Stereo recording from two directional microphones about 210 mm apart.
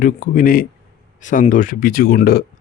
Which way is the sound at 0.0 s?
40° left (ahead or behind).